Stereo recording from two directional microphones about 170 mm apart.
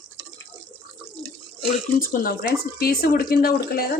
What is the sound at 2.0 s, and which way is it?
Speech, 60° left (ahead or behind).